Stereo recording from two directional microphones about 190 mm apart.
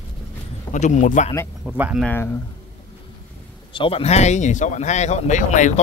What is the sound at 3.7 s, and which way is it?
Speech, 30° left (ahead or behind).